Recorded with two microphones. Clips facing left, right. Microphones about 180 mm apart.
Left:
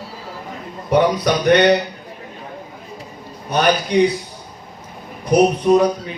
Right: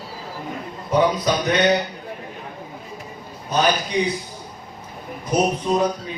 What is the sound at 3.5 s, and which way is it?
Speech, 65° left (ahead or behind).